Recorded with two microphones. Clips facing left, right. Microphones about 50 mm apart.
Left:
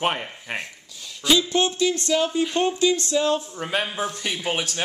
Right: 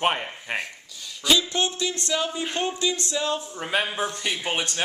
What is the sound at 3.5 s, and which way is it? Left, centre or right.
A woman's voice, centre.